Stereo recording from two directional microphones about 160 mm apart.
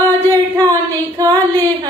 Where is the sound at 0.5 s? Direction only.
20° right (ahead or behind).